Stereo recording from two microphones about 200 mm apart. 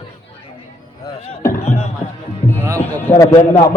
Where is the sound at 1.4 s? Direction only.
15° left (ahead or behind).